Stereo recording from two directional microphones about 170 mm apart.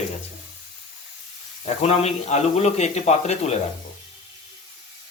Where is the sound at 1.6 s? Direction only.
40° left (ahead or behind).